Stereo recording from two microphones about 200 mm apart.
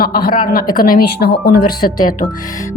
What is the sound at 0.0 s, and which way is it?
A woman's voice, 45° left (ahead or behind).